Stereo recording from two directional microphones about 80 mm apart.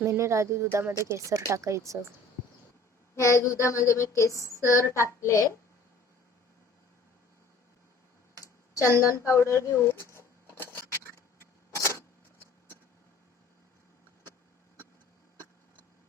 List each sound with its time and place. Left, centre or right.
0.0 s speech: right
3.2 s a woman's voice: left
8.4 s a sound: left